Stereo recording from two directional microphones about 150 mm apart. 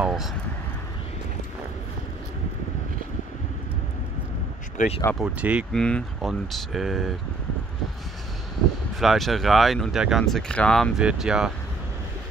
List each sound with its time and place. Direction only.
0.0 s speech: centre (ahead or behind)
4.7 s speech: 45° left (ahead or behind)
5.2 s speech: 5° right (ahead or behind)
5.7 s speech: 5° left (ahead or behind)
9.0 s speech: centre (ahead or behind)